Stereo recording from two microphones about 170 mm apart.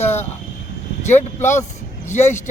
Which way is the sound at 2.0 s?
45° left (ahead or behind).